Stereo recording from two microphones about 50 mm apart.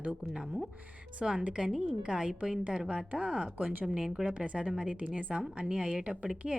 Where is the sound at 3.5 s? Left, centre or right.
Right.